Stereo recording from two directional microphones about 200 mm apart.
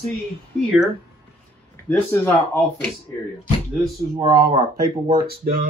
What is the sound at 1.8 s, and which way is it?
Speech, 10° left (ahead or behind).